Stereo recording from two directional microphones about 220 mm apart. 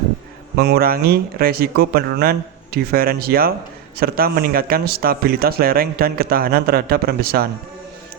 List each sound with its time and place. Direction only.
0.5 s a man's voice: 45° right (ahead or behind)